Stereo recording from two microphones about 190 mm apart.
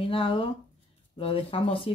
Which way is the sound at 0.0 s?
30° left (ahead or behind).